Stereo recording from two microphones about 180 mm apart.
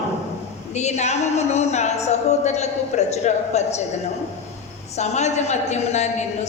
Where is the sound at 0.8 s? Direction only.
40° left (ahead or behind).